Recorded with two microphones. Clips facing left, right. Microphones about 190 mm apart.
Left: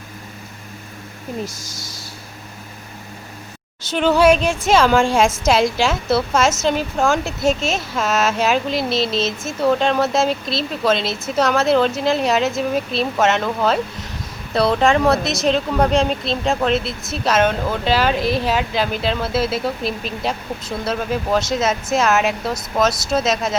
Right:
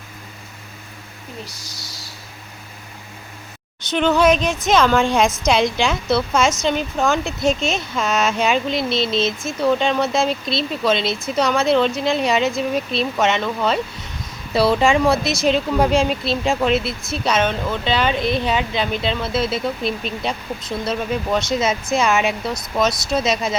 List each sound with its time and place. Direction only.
1.5 s speech: 50° left (ahead or behind)
3.8 s a woman's voice: 5° left (ahead or behind)